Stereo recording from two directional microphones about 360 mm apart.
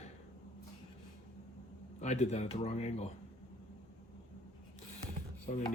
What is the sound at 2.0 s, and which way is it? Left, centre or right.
Speech, centre.